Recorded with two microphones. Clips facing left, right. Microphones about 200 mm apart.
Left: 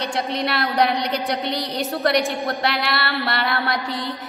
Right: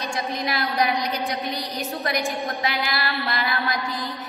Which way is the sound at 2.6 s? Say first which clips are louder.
Left 3 dB; 70° left (ahead or behind).